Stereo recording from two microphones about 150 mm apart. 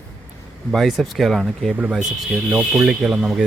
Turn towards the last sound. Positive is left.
turn(degrees=-5)  # may be behind; listen again after turning